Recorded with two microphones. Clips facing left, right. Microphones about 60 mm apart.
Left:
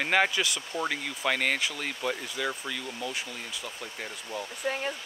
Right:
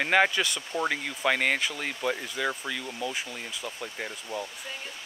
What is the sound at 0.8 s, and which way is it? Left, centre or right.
Speech, centre.